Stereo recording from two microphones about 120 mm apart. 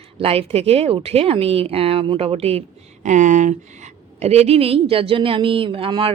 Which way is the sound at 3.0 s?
90° right.